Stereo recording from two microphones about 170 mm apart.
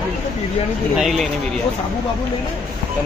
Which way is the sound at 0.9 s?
Centre (ahead or behind).